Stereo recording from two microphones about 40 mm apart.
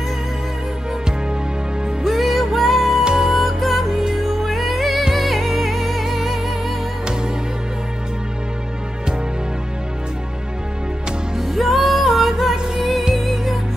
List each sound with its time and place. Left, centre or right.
2.0 s music: centre
3.0 s music: centre
3.3 s music: centre
11.1 s music: centre